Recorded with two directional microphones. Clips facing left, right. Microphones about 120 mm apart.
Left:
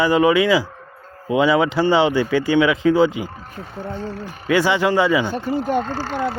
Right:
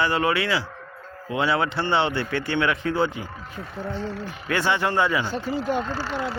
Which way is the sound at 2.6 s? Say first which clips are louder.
Left 8 dB; 90° left.